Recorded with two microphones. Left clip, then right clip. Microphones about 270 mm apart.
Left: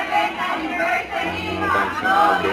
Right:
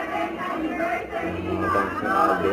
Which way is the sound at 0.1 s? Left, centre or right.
Centre.